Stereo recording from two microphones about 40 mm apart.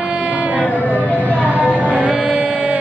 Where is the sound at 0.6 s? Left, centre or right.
Left.